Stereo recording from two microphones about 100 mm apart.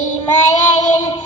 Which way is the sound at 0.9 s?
35° left (ahead or behind).